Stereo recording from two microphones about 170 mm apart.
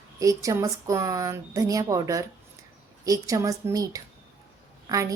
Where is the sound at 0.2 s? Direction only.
20° right (ahead or behind).